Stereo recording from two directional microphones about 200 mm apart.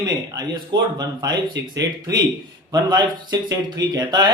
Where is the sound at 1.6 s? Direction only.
60° right (ahead or behind).